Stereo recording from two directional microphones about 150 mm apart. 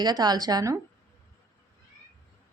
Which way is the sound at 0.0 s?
25° right (ahead or behind).